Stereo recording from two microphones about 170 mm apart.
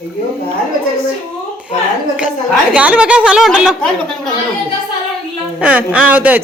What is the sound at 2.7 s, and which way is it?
Speech, 5° right (ahead or behind).